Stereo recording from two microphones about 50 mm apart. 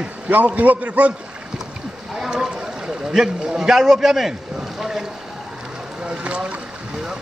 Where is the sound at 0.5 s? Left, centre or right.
Right.